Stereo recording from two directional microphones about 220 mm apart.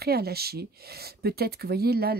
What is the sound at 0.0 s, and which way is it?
Speech, 45° right (ahead or behind).